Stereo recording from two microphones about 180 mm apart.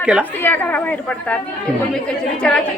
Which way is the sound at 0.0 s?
5° right (ahead or behind).